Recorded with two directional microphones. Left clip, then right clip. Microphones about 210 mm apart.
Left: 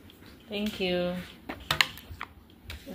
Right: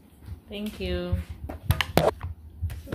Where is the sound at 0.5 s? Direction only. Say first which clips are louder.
Left 3 dB; 20° left (ahead or behind).